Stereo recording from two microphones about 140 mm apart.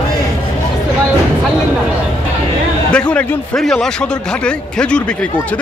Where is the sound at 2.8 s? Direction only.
10° left (ahead or behind).